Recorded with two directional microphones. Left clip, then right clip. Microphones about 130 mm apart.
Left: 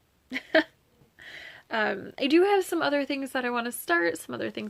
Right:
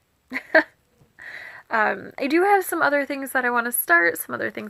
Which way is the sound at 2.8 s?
50° left (ahead or behind).